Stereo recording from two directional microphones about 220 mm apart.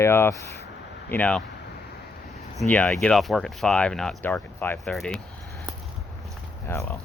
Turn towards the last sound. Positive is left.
turn(degrees=10)  # may be behind; listen again after turning